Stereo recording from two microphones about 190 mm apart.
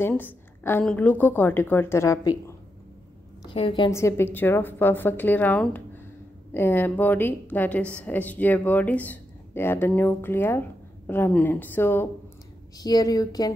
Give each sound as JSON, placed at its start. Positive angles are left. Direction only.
{"t": 0.0, "sound": "a woman's voice", "side_deg": 10}
{"t": 3.5, "sound": "speech", "side_deg": 25}
{"t": 3.9, "sound": "a woman's voice", "side_deg": 15}